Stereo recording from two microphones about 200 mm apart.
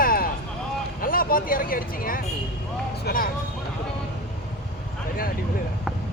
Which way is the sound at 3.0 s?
45° left (ahead or behind).